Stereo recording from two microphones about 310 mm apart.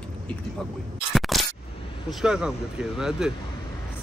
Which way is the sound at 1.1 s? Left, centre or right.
Centre.